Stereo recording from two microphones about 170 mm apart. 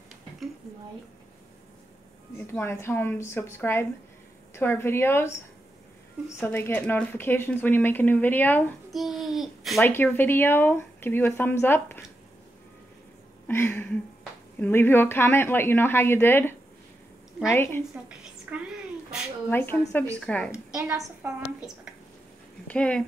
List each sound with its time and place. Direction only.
2.3 s speech: 15° left (ahead or behind)
6.4 s speech: 10° left (ahead or behind)
8.9 s a child's voice: centre (ahead or behind)
9.8 s speech: 10° left (ahead or behind)
13.5 s speech: 10° left (ahead or behind)
18.0 s a woman's voice: 5° right (ahead or behind)
19.5 s a child's voice: 10° left (ahead or behind)
20.7 s a woman's voice: 20° right (ahead or behind)
22.7 s speech: 5° left (ahead or behind)